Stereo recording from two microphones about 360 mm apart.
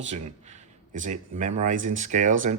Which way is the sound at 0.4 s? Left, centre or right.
Centre.